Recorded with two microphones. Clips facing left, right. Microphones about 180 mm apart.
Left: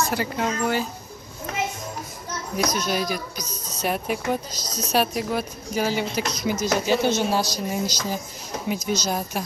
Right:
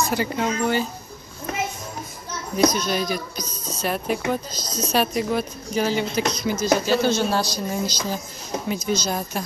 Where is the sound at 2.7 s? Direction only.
10° left (ahead or behind).